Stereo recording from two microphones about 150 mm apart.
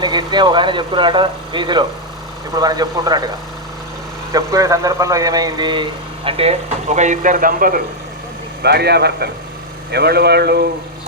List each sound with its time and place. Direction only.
0.0 s a man's voice: 30° right (ahead or behind)
4.3 s a man's voice: 25° right (ahead or behind); by 7.8 s 70° right (ahead or behind)
8.6 s speech: 90° right